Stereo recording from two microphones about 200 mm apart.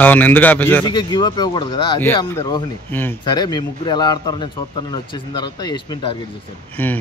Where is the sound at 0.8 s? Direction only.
20° left (ahead or behind).